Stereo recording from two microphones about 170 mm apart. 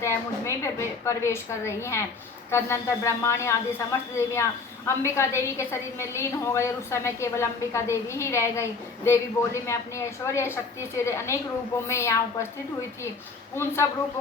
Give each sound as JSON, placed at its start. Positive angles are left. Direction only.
{"t": 0.0, "sound": "a woman's voice", "side_deg": 15}